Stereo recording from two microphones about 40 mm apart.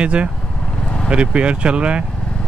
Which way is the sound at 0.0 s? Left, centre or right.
Right.